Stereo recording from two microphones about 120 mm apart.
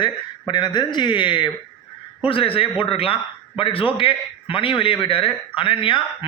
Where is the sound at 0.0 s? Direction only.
40° left (ahead or behind).